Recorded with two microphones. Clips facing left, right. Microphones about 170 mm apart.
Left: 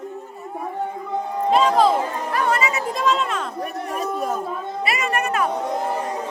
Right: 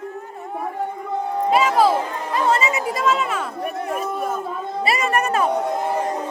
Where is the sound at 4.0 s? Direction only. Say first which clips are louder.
Even; 40° left (ahead or behind).